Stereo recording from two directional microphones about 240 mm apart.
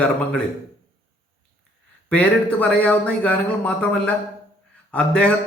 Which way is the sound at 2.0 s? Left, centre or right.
Centre.